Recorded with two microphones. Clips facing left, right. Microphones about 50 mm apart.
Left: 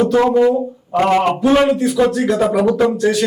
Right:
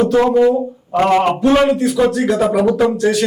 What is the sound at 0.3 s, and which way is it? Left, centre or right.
A man's voice, centre.